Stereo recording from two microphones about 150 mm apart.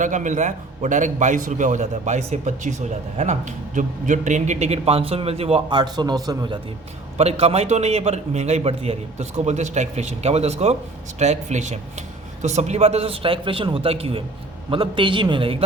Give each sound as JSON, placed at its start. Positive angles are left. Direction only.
{"t": 0.0, "sound": "a man's voice", "side_deg": -55}
{"t": 7.2, "sound": "a man's voice", "side_deg": -45}